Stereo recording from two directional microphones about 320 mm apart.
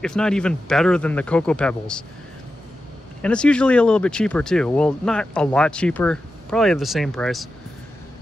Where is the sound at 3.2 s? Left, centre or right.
Centre.